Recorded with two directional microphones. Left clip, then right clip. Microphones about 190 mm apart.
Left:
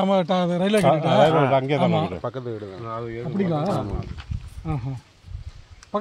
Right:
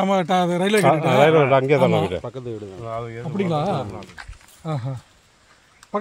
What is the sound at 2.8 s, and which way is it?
Speech, 40° right (ahead or behind).